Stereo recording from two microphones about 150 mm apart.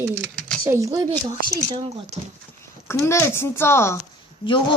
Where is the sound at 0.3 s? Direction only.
5° left (ahead or behind).